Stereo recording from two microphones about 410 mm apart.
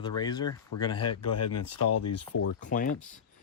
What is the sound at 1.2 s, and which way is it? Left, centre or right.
Speech, left.